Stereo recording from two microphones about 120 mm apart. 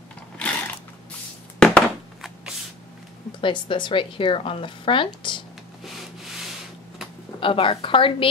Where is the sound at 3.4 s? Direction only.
40° left (ahead or behind).